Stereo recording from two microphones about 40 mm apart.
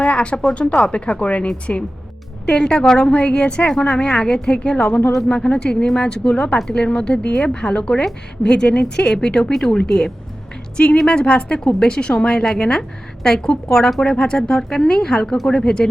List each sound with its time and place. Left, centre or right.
0.0 s music: left
0.4 s a woman's voice: left
9.5 s a woman's voice: centre